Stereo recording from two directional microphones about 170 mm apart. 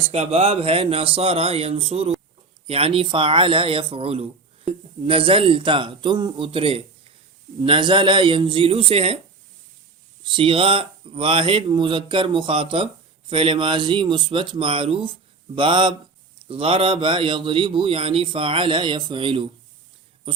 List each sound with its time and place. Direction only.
0.1 s speech: 35° right (ahead or behind)
10.2 s speech: 30° right (ahead or behind)